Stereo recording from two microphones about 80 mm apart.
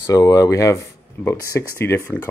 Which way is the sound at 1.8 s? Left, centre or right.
Left.